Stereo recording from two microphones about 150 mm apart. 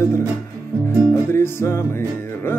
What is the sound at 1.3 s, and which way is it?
Music, 15° left (ahead or behind).